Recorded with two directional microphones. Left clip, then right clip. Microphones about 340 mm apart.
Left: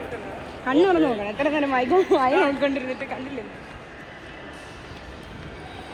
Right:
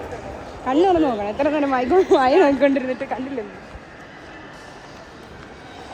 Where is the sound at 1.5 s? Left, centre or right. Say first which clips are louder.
Right 2 dB; right.